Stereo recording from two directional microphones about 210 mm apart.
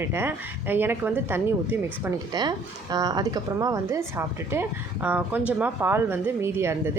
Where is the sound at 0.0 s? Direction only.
10° right (ahead or behind).